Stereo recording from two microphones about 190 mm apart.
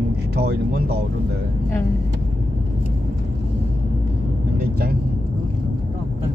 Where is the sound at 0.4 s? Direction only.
55° right (ahead or behind).